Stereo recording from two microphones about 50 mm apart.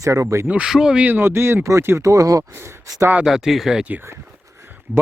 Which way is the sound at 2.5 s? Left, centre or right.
Right.